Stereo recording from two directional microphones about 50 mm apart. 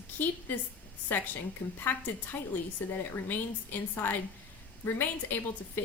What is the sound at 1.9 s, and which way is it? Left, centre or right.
A woman's voice, left.